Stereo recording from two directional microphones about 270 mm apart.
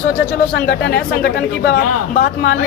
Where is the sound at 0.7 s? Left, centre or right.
Left.